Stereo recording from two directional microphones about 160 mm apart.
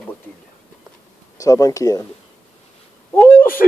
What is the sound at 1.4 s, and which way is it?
Speech, 20° left (ahead or behind).